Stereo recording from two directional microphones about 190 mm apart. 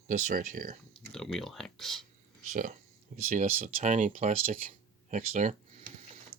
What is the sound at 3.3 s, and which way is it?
Speech, 40° right (ahead or behind).